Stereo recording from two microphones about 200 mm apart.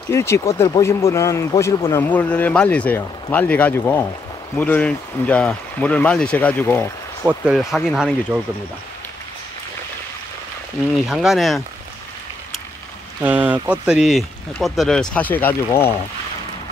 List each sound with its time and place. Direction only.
0.1 s speech: 15° left (ahead or behind)
7.2 s speech: 5° right (ahead or behind)
11.1 s speech: centre (ahead or behind)
13.2 s speech: 10° right (ahead or behind); by 15.9 s 10° left (ahead or behind)